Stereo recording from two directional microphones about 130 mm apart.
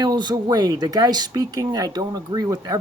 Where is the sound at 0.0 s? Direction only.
35° right (ahead or behind).